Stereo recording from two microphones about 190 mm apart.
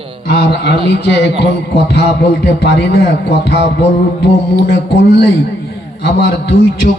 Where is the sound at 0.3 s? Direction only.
60° left (ahead or behind).